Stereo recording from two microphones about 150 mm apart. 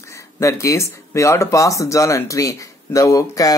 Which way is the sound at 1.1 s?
20° left (ahead or behind).